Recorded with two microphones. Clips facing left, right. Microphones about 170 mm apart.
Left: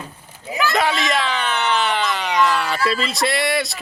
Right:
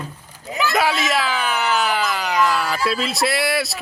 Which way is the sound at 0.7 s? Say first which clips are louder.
Right 1 dB; 5° right (ahead or behind).